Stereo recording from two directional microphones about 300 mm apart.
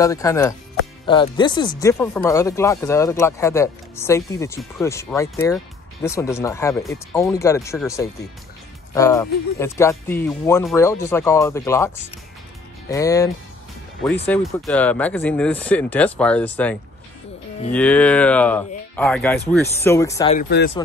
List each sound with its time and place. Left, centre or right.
0.0 s speech: centre
8.9 s speech: centre
12.9 s speech: centre
17.7 s speech: centre
20.3 s speech: left